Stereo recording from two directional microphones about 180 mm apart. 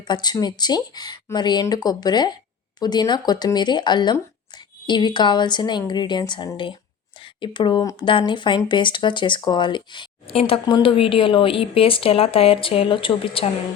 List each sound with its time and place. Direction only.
0.0 s speech: 25° left (ahead or behind)